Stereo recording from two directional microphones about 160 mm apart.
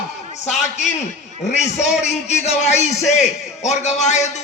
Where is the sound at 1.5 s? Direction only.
45° left (ahead or behind).